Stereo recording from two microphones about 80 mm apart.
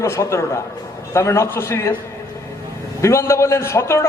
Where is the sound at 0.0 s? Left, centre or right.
Left.